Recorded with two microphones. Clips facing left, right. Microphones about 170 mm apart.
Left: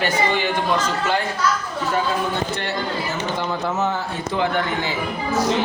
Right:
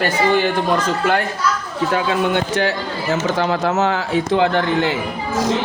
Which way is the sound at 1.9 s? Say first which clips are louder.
Right 4 dB; 80° right.